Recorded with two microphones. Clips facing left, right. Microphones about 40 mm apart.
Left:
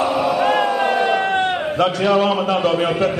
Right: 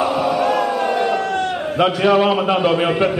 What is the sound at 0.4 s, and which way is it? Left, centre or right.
Crowd, left.